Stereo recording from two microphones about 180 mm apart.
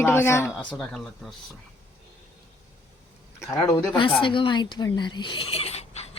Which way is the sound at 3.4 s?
15° left (ahead or behind).